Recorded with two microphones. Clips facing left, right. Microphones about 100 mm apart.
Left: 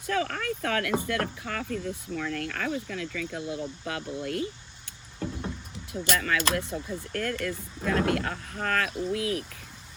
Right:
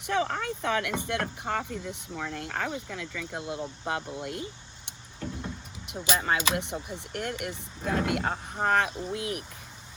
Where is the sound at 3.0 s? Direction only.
90° left.